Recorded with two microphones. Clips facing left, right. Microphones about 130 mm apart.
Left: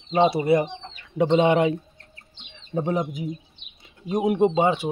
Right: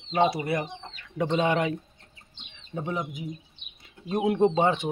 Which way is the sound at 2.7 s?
40° left (ahead or behind).